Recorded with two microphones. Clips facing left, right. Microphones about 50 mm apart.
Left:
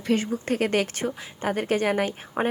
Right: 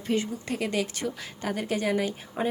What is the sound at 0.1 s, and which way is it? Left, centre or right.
Speech, left.